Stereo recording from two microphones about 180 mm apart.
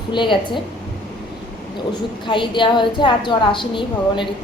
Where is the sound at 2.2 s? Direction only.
25° left (ahead or behind).